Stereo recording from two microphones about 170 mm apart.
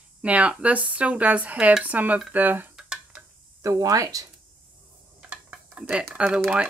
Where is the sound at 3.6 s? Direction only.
20° right (ahead or behind).